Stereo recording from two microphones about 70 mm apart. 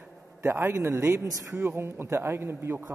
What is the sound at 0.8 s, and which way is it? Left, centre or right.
A man's voice, right.